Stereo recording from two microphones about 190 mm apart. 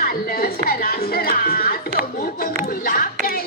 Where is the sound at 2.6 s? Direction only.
50° left (ahead or behind).